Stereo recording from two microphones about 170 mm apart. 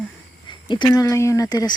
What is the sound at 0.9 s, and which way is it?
Speech, 20° left (ahead or behind).